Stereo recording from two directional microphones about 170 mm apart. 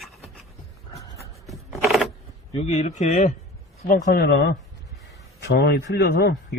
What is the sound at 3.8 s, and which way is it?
Speech, 55° left (ahead or behind).